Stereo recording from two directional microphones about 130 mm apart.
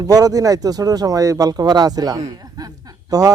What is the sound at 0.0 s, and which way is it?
Speech, 25° right (ahead or behind).